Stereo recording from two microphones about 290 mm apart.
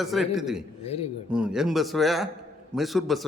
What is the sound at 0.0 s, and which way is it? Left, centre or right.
Speech, centre.